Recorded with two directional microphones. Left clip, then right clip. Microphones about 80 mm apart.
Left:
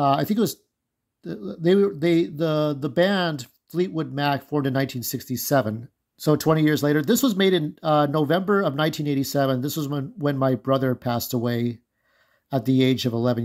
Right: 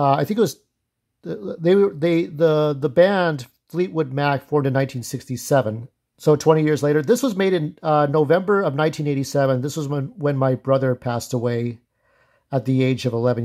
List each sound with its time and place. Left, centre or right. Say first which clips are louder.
0.0 s speech: right 3 dB; right
3.3 s speech: right 2 dB; right
6.5 s speech: right 3 dB; right